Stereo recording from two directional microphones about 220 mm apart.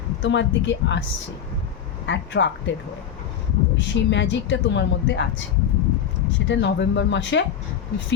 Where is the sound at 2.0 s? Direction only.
55° left (ahead or behind).